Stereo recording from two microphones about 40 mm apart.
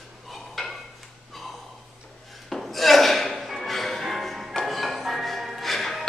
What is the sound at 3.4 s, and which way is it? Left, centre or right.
Music, centre.